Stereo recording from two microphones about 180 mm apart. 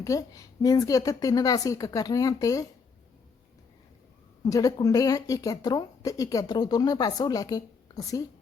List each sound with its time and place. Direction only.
0.0 s speech: 20° left (ahead or behind)
4.4 s speech: 20° left (ahead or behind)